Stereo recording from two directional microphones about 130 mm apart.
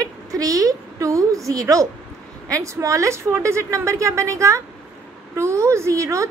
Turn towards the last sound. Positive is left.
turn(degrees=-25)  # may be behind; listen again after turning